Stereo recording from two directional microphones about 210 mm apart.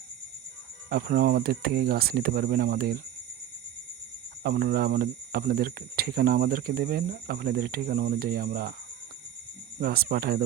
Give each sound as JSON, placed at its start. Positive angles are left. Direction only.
{"t": 0.9, "sound": "speech", "side_deg": -45}
{"t": 4.4, "sound": "speech", "side_deg": -45}
{"t": 9.8, "sound": "speech", "side_deg": -45}